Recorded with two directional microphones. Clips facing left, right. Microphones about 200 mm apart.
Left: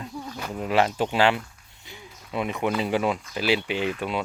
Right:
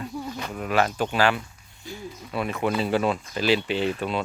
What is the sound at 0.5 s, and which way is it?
Speech, 25° left (ahead or behind).